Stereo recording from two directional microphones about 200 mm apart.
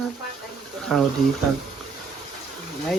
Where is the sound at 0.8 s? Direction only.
Centre (ahead or behind).